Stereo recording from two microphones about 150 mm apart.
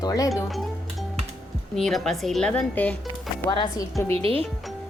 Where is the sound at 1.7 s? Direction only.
Centre (ahead or behind).